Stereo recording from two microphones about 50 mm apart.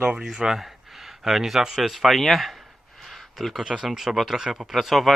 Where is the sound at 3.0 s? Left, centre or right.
Centre.